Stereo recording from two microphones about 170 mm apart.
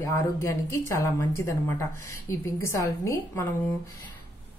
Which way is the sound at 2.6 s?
15° left (ahead or behind).